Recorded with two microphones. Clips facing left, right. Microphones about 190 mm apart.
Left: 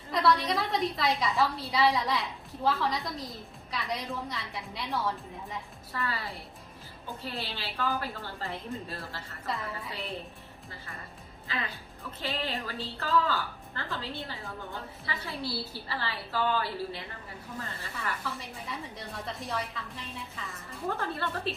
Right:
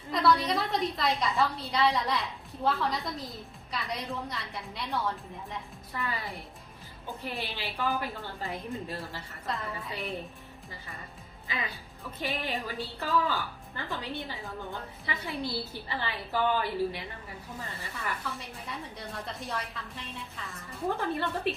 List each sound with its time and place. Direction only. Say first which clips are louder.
0.1 s a woman's voice: right 1 dB; centre (ahead or behind)
5.9 s a woman's voice: left 1 dB; 15° right (ahead or behind)
7.3 s a woman's voice: right 1 dB; 15° right (ahead or behind)
9.5 s a woman's voice: even; centre (ahead or behind)
11.5 s a woman's voice: even; 15° right (ahead or behind)
17.9 s a woman's voice: left 1 dB; centre (ahead or behind)
20.9 s a woman's voice: right 2 dB; 15° right (ahead or behind)